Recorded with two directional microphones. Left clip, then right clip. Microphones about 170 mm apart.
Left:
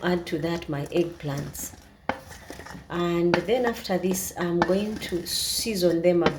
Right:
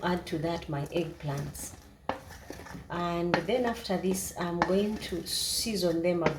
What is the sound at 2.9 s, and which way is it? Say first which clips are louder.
Speech: left 6 dB; 55° left (ahead or behind).